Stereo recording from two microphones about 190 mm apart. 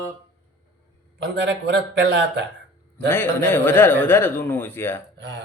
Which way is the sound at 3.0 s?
10° left (ahead or behind).